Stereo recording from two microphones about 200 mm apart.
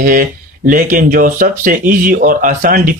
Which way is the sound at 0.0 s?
45° right (ahead or behind).